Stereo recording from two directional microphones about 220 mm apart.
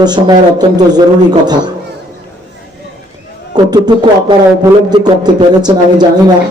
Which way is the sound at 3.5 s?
20° right (ahead or behind).